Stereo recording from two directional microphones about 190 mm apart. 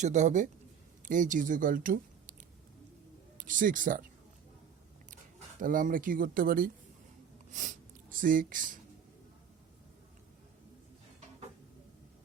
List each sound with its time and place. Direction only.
0.0 s a man's voice: 40° right (ahead or behind)
3.3 s speech: 45° right (ahead or behind)
5.5 s speech: 45° right (ahead or behind)